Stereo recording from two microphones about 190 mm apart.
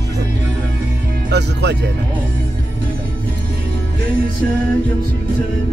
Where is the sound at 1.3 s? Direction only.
60° right (ahead or behind).